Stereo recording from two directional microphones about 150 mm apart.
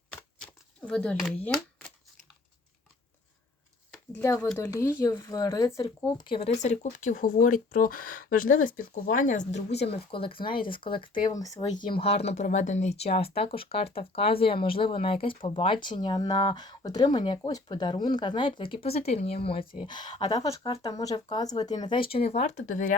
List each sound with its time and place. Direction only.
0.1 s a sound: 5° left (ahead or behind)
4.9 s speech: 20° left (ahead or behind)
6.5 s speech: 50° left (ahead or behind)
9.9 s speech: 35° left (ahead or behind)
11.1 s speech: 25° left (ahead or behind)
11.6 s speech: 55° left (ahead or behind); by 20.4 s 35° left (ahead or behind)
20.4 s speech: 25° left (ahead or behind)
22.1 s speech: 45° left (ahead or behind); by 23.0 s 60° left (ahead or behind)